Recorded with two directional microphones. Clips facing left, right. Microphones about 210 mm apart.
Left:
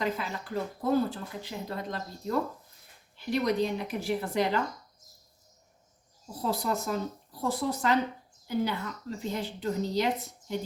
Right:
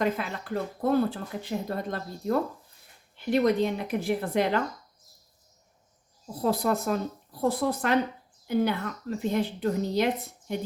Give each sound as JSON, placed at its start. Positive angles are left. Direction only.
{"t": 0.0, "sound": "speech", "side_deg": -55}
{"t": 6.4, "sound": "speech", "side_deg": -55}